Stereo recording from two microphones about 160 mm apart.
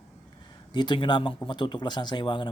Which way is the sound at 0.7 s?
30° left (ahead or behind).